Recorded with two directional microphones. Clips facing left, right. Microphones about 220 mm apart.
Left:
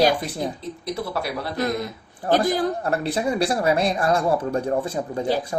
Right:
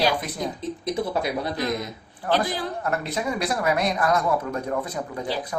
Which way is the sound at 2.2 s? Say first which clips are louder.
Left 4 dB; 45° left (ahead or behind).